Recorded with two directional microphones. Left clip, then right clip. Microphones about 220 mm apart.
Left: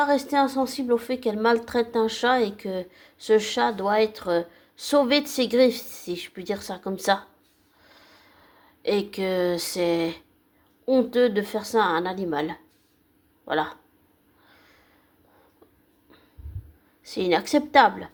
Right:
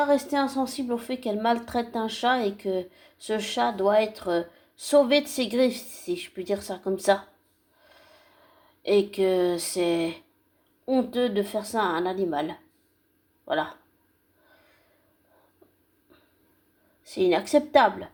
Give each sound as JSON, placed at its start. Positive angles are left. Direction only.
{"t": 0.0, "sound": "a woman's voice", "side_deg": 20}
{"t": 7.9, "sound": "snort", "side_deg": 20}
{"t": 8.8, "sound": "a woman's voice", "side_deg": 20}
{"t": 17.0, "sound": "a woman's voice", "side_deg": 20}